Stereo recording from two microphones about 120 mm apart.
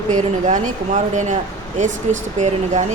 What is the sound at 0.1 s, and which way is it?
A woman's voice, 80° right.